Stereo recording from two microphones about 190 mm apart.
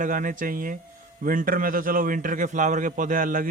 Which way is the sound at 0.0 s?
45° right (ahead or behind).